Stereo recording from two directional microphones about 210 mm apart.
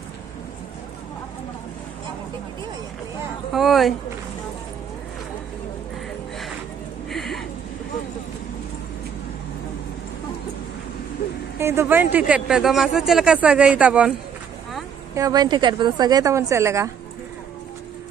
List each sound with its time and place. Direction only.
3.5 s speech: centre (ahead or behind)
7.1 s a sound: centre (ahead or behind)
11.6 s speech: 10° right (ahead or behind)
15.1 s a woman's voice: 15° right (ahead or behind)